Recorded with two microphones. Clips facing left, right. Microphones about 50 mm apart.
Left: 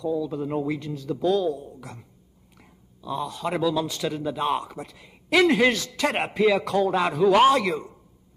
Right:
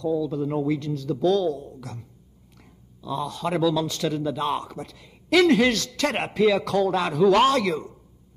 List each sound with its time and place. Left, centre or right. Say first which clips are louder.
0.0 s a man's voice: right 2 dB; centre